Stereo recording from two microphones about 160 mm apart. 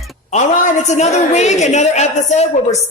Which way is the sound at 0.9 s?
45° left (ahead or behind).